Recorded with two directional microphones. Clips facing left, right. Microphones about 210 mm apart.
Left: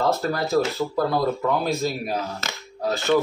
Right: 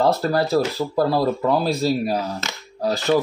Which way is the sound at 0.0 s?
35° right (ahead or behind).